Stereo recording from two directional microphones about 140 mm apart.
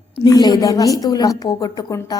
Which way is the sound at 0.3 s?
30° left (ahead or behind).